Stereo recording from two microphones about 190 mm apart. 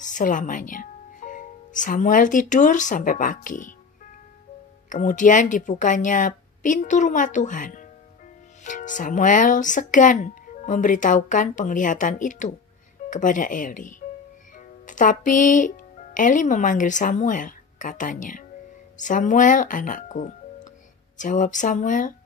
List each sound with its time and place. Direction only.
0.0 s speech: 45° left (ahead or behind)
4.8 s speech: 40° left (ahead or behind)